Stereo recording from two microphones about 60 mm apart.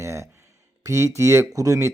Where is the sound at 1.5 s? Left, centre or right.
Right.